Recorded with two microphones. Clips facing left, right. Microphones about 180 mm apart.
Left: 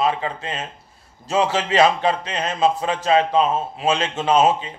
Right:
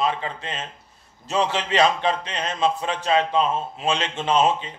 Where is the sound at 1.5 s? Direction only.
40° left (ahead or behind).